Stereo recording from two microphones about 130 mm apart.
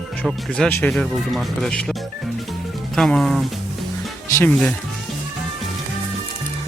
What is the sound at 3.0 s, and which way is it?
Speech, 5° left (ahead or behind).